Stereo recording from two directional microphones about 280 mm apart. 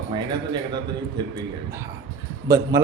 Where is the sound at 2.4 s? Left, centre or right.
Centre.